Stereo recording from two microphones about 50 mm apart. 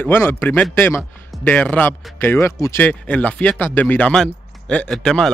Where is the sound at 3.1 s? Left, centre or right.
Left.